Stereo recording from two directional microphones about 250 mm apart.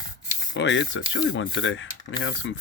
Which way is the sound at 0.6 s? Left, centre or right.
Left.